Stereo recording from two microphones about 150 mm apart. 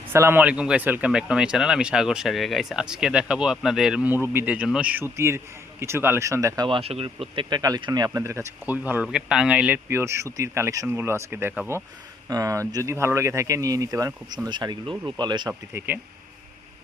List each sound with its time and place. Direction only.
0.1 s speech: 15° right (ahead or behind)
6.7 s speech: 40° right (ahead or behind)
7.6 s speech: 25° right (ahead or behind)
15.7 s speech: 15° right (ahead or behind)